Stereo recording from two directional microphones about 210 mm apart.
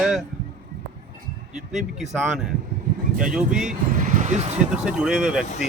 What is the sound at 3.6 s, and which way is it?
Speech, 40° right (ahead or behind).